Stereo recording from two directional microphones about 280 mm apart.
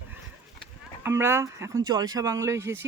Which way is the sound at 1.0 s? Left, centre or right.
Centre.